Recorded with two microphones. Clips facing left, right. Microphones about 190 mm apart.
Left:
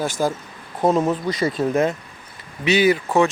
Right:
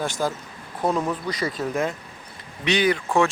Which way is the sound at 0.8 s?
25° left (ahead or behind).